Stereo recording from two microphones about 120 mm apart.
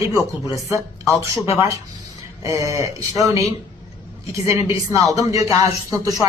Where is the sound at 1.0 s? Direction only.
25° left (ahead or behind).